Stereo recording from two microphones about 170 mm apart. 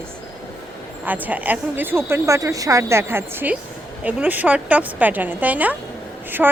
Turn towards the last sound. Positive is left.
turn(degrees=-5)  # may be behind; listen again after turning